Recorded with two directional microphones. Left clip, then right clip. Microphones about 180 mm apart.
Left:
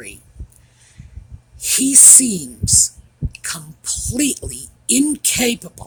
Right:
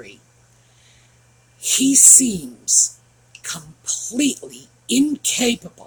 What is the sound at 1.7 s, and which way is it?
Speech, 55° left (ahead or behind).